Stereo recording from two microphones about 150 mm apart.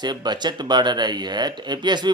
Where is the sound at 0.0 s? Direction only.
30° right (ahead or behind).